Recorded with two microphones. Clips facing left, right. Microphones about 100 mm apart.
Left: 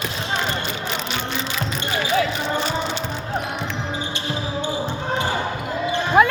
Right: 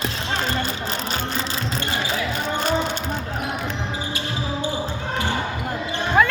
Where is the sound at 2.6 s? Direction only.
50° right (ahead or behind).